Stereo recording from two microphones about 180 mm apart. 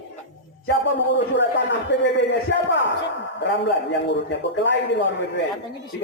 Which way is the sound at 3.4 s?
75° left (ahead or behind).